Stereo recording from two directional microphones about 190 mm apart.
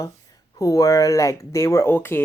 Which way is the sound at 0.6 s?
20° left (ahead or behind).